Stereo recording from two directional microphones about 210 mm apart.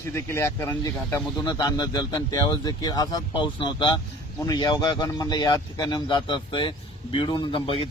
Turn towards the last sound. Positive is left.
turn(degrees=25)  # may be behind; listen again after turning